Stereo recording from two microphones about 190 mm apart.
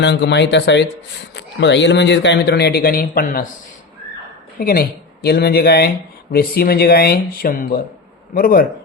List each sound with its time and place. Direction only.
0.0 s speech: 60° left (ahead or behind); by 3.5 s 45° left (ahead or behind)
4.6 s speech: 50° left (ahead or behind)